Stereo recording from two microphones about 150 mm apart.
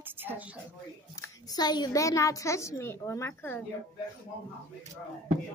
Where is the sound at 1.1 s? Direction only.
25° left (ahead or behind).